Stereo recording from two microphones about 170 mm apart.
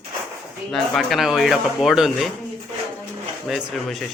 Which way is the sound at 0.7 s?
Centre (ahead or behind).